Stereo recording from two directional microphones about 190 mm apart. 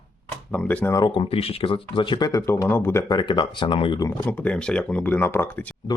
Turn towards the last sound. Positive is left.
turn(degrees=10)  # may be behind; listen again after turning